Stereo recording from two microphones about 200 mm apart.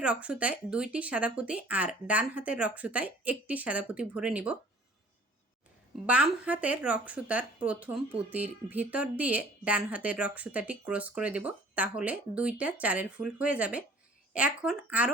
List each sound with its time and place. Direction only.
0.0 s speech: 5° right (ahead or behind)
6.1 s speech: 5° right (ahead or behind)